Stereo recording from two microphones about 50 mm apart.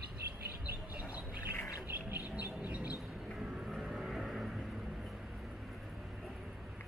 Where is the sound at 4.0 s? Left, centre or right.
Centre.